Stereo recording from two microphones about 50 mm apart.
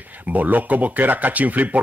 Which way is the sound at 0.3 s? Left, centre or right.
Right.